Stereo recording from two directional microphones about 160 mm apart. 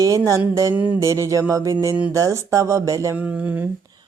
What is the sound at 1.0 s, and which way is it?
Speech, 20° right (ahead or behind).